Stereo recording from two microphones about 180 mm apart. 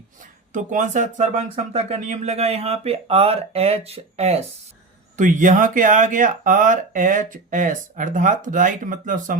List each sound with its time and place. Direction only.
0.2 s speech: 45° right (ahead or behind)
5.1 s speech: 45° right (ahead or behind)